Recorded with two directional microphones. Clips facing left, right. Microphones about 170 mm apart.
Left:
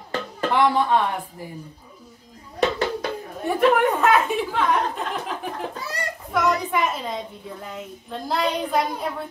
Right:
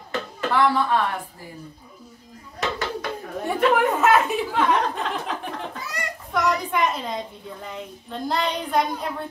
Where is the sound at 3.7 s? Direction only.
Centre (ahead or behind).